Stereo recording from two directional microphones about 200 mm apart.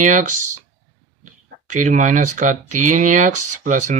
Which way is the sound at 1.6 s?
40° right (ahead or behind).